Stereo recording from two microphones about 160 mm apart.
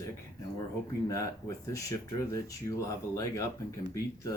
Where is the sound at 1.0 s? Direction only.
20° left (ahead or behind).